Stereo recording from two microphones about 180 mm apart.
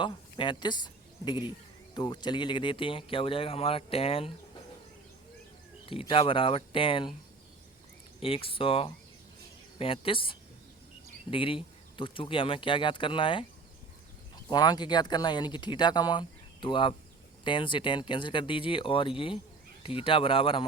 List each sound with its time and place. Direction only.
0.0 s speech: 25° left (ahead or behind)
2.0 s speech: 25° left (ahead or behind)
5.9 s speech: 30° left (ahead or behind)
8.2 s speech: 30° left (ahead or behind)
14.5 s speech: 25° left (ahead or behind)